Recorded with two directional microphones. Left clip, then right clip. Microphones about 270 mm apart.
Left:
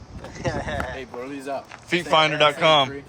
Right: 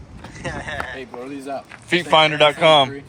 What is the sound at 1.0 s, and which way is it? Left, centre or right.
Speech, centre.